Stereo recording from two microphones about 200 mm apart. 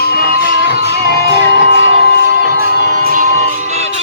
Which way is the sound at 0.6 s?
55° left (ahead or behind).